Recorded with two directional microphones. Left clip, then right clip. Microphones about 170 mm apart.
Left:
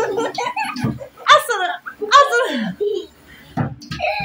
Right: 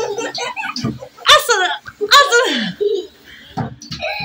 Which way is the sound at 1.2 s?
10° right (ahead or behind).